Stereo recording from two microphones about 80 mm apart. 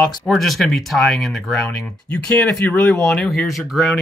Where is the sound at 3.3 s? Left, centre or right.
Centre.